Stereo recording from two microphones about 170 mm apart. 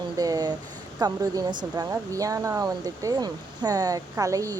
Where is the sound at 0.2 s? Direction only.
20° right (ahead or behind).